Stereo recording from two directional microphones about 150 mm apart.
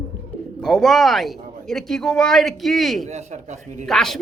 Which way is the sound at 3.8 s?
Centre (ahead or behind).